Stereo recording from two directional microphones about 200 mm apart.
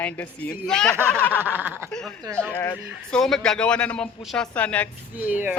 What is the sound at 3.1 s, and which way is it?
Speech, 5° left (ahead or behind).